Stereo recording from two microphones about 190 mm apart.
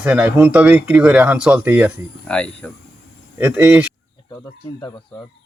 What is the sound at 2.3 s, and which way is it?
Speech, 5° left (ahead or behind).